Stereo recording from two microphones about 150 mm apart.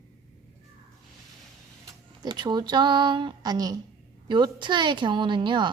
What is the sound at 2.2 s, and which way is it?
A woman's voice, 30° right (ahead or behind).